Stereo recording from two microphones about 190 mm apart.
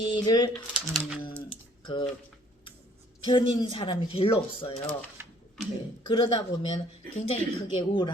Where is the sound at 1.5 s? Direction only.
25° left (ahead or behind).